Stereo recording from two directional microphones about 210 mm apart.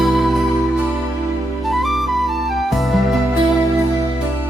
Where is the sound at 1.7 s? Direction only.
Centre (ahead or behind).